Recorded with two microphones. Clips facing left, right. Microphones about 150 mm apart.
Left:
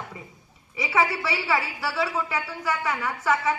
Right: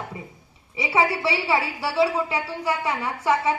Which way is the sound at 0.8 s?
30° right (ahead or behind).